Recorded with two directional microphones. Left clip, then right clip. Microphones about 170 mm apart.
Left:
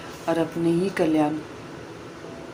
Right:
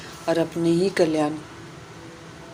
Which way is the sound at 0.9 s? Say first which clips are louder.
Right 1 dB; 30° right (ahead or behind).